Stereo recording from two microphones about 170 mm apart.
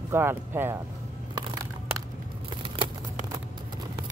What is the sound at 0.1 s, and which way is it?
Speech, 15° right (ahead or behind).